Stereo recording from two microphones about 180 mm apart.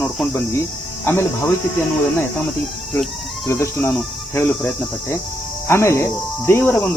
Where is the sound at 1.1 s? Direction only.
15° left (ahead or behind).